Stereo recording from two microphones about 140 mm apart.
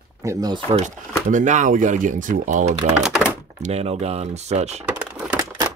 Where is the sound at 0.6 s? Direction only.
50° right (ahead or behind).